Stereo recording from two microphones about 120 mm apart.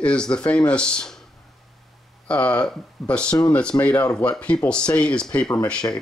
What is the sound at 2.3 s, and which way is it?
Speech, 10° left (ahead or behind).